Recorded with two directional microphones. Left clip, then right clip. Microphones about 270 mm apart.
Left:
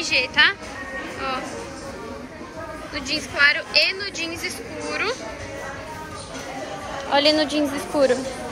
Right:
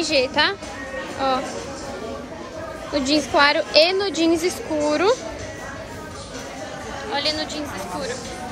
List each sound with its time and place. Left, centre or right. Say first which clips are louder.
0.1 s speech: left 2 dB; centre
2.9 s a woman's voice: right 8 dB; centre
7.1 s a woman's voice: left 6 dB; centre